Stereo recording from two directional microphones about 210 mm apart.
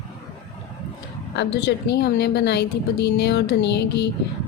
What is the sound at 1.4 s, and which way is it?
A woman's voice, 55° left (ahead or behind).